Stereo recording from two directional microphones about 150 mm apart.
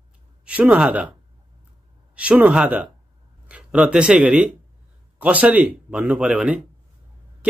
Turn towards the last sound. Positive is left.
turn(degrees=-10)  # may be behind; listen again after turning